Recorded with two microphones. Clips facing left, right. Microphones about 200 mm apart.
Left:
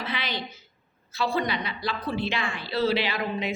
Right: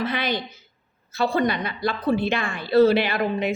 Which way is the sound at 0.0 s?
50° right (ahead or behind).